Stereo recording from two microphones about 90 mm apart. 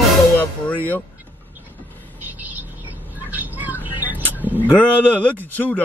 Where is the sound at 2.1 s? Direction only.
20° right (ahead or behind).